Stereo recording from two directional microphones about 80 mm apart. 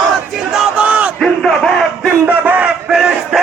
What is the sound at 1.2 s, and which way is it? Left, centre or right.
Crowd, centre.